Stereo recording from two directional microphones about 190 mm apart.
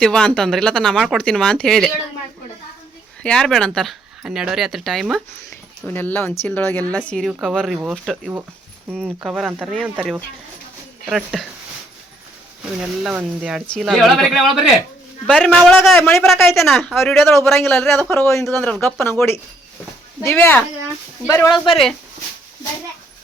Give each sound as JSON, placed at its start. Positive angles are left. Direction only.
{"t": 0.0, "sound": "speech", "side_deg": 5}
{"t": 3.2, "sound": "speech", "side_deg": 5}
{"t": 12.8, "sound": "speech", "side_deg": -5}
{"t": 17.1, "sound": "speech", "side_deg": 10}
{"t": 21.5, "sound": "speech", "side_deg": 0}